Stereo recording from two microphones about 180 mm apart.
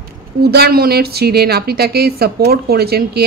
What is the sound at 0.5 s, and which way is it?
A woman's voice, 60° right (ahead or behind).